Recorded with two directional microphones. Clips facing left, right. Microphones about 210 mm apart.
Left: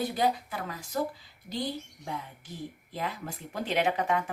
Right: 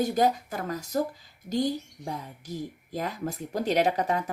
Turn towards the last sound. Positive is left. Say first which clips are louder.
# right 3 dB
turn(degrees=-35)  # may be behind; listen again after turning